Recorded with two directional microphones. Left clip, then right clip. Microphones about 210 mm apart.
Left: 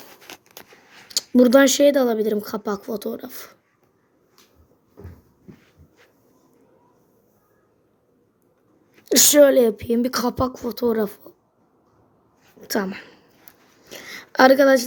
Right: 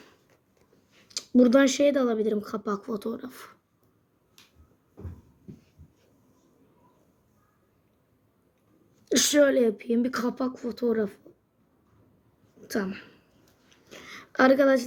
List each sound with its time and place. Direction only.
1.0 s speech: 5° left (ahead or behind)
9.0 s speech: 5° left (ahead or behind)
12.6 s a sound: 5° left (ahead or behind)